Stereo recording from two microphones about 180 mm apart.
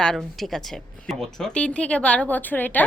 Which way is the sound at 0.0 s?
Centre (ahead or behind).